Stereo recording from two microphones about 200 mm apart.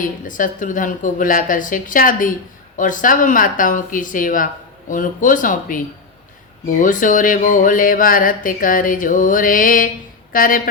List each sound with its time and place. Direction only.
0.0 s speech: 40° left (ahead or behind)